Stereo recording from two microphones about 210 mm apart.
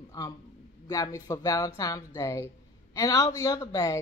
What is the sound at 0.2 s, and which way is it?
Speech, 15° left (ahead or behind).